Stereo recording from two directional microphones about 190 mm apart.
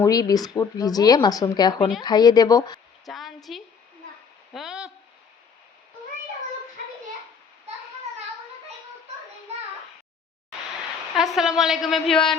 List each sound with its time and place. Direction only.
0.0 s speech: 20° left (ahead or behind)
3.1 s a sound: centre (ahead or behind)
11.2 s a woman's voice: centre (ahead or behind)